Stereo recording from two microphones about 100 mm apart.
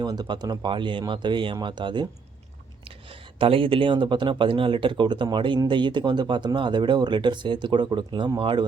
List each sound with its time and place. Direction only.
0.0 s speech: 45° right (ahead or behind)
2.8 s speech: 65° right (ahead or behind)